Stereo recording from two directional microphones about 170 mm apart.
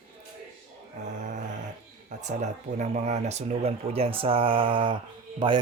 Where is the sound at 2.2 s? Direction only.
45° right (ahead or behind).